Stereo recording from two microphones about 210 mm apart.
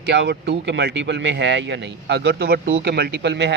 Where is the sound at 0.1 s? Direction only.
55° right (ahead or behind).